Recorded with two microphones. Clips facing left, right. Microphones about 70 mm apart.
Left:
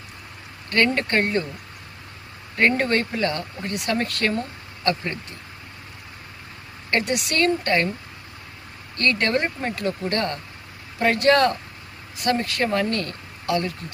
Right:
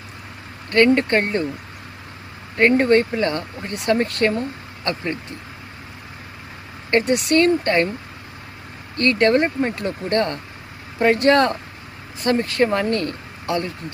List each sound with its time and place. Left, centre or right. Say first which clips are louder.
0.7 s speech: right 6 dB; right
2.6 s speech: right 5 dB; right
6.9 s speech: right 6 dB; right
9.0 s speech: right 5 dB; right